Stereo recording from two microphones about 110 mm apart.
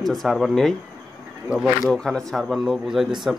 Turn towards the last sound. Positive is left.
turn(degrees=-5)  # may be behind; listen again after turning